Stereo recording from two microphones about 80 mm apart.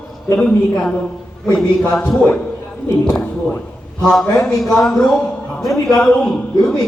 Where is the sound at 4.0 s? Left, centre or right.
Centre.